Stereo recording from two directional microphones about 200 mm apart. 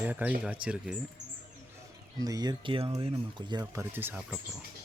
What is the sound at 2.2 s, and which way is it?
Speech, 15° right (ahead or behind).